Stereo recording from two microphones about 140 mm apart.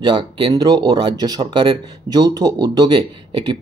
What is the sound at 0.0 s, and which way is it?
Speech, 35° right (ahead or behind).